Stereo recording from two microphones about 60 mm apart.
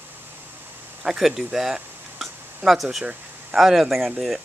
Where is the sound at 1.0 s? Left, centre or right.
Centre.